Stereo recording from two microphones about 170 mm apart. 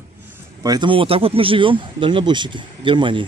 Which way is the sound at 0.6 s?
25° right (ahead or behind).